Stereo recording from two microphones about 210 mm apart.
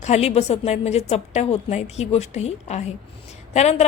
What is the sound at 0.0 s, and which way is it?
A woman's voice, 30° left (ahead or behind).